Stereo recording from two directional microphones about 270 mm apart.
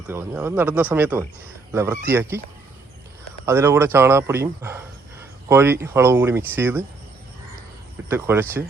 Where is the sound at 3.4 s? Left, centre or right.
Centre.